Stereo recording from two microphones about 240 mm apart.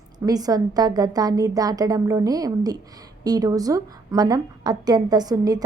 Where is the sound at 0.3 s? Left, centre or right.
Centre.